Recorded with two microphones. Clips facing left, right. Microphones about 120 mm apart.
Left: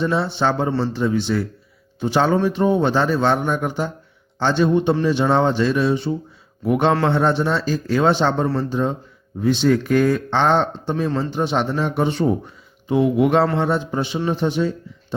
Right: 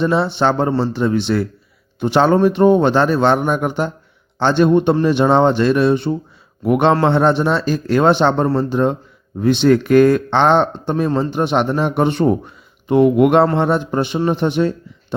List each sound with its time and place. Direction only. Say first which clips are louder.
0.0 s a man's voice: right 4 dB; 70° right (ahead or behind)